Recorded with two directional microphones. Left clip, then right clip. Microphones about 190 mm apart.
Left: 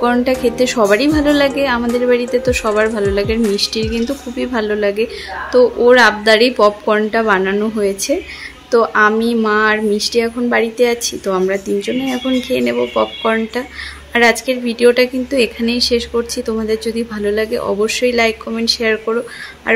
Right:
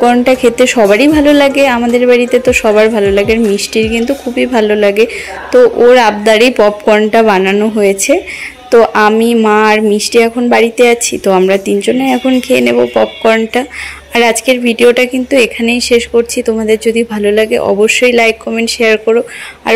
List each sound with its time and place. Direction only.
0.0 s a woman's voice: 15° right (ahead or behind)